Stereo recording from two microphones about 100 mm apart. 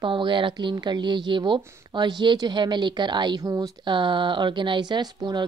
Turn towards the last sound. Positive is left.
turn(degrees=-45)  # may be behind; listen again after turning